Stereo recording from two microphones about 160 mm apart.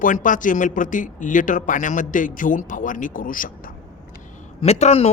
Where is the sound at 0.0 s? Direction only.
55° left (ahead or behind).